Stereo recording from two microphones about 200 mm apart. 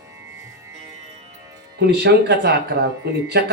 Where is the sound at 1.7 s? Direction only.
55° right (ahead or behind).